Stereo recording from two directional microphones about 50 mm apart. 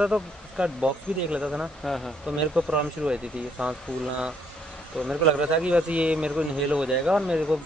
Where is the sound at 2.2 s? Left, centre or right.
Right.